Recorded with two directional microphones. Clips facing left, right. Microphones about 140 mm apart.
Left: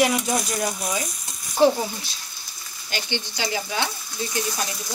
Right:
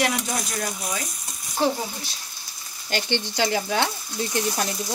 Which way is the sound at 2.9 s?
55° right (ahead or behind).